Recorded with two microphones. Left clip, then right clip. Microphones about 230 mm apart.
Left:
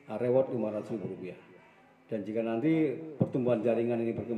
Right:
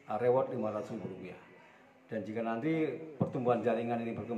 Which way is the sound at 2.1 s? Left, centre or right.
Centre.